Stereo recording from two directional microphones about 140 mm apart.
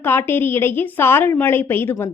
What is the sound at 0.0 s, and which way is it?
A woman's voice, 15° left (ahead or behind).